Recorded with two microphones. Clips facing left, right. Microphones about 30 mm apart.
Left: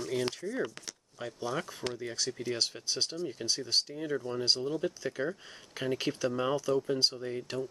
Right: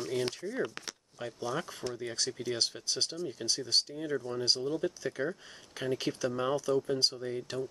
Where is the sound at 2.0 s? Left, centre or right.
Centre.